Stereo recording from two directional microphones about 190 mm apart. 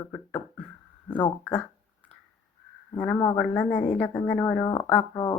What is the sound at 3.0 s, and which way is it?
Speech, 10° left (ahead or behind).